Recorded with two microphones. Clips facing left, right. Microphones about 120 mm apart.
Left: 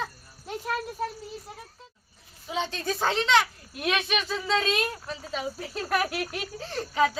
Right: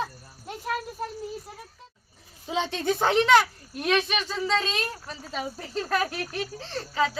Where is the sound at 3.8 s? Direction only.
Centre (ahead or behind).